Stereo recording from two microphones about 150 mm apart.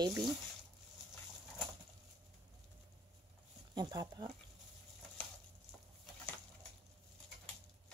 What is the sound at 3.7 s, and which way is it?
Speech, 25° right (ahead or behind).